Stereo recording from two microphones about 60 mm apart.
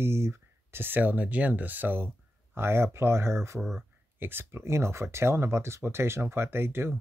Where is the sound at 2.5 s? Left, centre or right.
Right.